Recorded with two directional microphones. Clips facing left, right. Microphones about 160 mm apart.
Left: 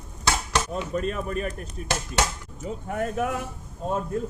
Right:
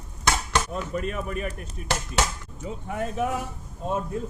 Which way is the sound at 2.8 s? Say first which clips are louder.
Left 1 dB; 50° left (ahead or behind).